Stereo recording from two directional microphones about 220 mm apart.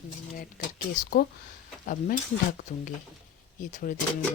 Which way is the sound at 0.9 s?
45° left (ahead or behind).